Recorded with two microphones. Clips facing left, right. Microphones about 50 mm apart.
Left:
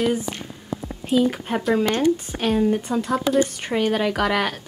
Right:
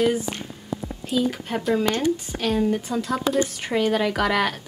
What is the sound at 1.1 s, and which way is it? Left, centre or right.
Speech, left.